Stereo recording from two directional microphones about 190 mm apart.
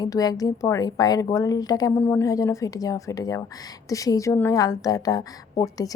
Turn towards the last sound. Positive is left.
turn(degrees=20)  # may be behind; listen again after turning